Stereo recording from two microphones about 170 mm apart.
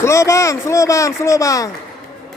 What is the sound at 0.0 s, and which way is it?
Speech, 15° left (ahead or behind).